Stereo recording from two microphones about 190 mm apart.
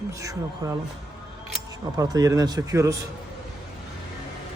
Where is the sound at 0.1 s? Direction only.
15° right (ahead or behind).